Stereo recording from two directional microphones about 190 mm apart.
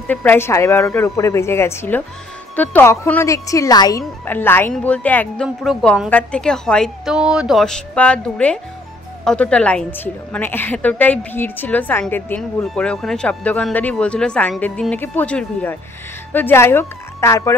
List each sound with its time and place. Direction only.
0.0 s a woman's voice: 10° left (ahead or behind)